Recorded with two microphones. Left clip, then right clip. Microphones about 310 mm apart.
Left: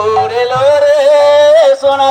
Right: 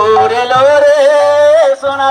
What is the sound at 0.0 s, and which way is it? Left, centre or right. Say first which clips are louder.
Music: right 2 dB; left.